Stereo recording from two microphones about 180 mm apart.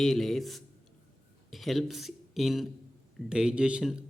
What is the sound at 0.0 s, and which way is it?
A man's voice, centre (ahead or behind).